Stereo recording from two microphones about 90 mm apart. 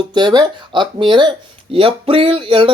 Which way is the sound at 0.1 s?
55° right (ahead or behind).